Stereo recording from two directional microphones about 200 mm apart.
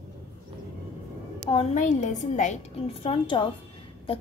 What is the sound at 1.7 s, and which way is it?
A woman's voice, 40° left (ahead or behind).